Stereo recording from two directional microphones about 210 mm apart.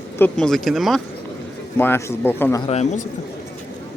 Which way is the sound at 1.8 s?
10° left (ahead or behind).